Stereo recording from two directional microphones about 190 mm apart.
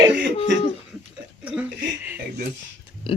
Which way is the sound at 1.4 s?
5° right (ahead or behind).